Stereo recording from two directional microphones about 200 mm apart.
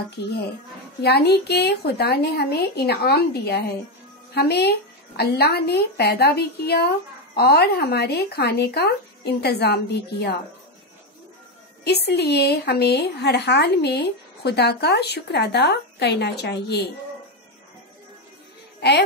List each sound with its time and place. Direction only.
0.2 s a woman's voice: 55° left (ahead or behind)
11.8 s a woman's voice: 55° left (ahead or behind)
18.8 s a woman's voice: 55° left (ahead or behind)